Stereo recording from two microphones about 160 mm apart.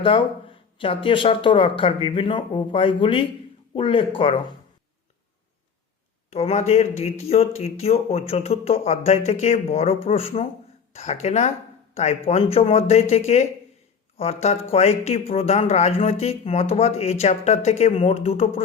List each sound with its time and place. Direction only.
0.0 s speech: 35° left (ahead or behind)
6.3 s speech: 40° left (ahead or behind)